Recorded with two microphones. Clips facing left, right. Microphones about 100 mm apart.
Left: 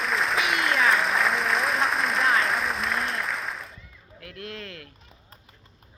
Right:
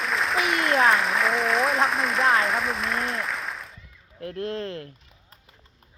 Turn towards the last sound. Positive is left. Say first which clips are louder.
# right 8 dB
turn(degrees=-30)  # may be behind; listen again after turning